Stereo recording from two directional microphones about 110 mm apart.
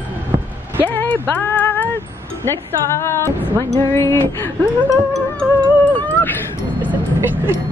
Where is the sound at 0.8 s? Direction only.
15° left (ahead or behind).